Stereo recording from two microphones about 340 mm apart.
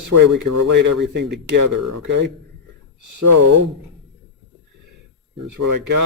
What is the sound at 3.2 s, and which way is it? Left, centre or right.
Speech, right.